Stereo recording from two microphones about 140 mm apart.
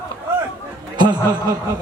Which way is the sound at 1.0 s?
30° right (ahead or behind).